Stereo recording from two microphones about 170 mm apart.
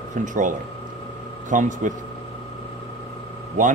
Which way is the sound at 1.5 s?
50° right (ahead or behind).